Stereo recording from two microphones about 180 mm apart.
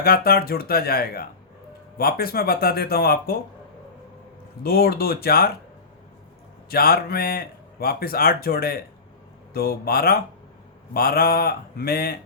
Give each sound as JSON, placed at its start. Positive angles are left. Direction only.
{"t": 0.0, "sound": "a man's voice", "side_deg": 55}
{"t": 4.6, "sound": "a man's voice", "side_deg": 55}
{"t": 6.7, "sound": "a man's voice", "side_deg": 55}